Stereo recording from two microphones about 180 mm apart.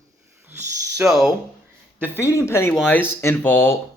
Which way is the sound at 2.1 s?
15° left (ahead or behind).